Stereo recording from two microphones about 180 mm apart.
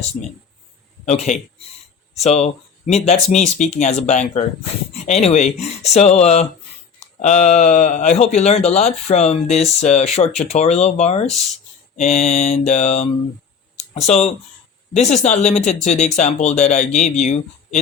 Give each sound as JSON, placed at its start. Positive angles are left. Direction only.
{"t": 1.0, "sound": "speech", "side_deg": 40}